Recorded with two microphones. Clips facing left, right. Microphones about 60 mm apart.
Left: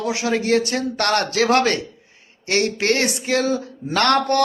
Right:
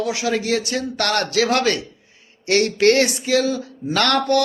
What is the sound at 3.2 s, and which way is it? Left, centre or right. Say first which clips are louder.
Speech: right 1 dB; left.